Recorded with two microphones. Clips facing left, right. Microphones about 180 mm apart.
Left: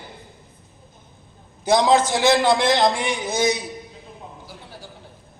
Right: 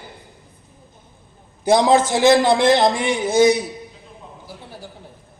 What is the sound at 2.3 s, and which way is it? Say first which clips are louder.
Speech: right 3 dB; 15° right (ahead or behind).